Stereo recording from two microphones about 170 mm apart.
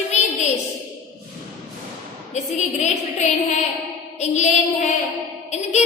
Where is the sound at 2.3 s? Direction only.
40° left (ahead or behind).